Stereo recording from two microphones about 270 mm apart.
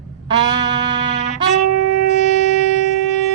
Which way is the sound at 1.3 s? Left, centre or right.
Left.